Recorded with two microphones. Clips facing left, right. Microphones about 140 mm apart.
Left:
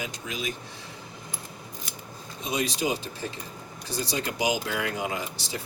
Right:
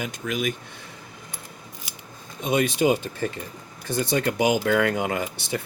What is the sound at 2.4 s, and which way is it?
Speech, 55° right (ahead or behind).